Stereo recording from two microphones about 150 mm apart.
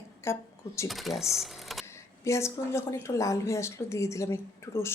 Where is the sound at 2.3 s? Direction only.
20° left (ahead or behind).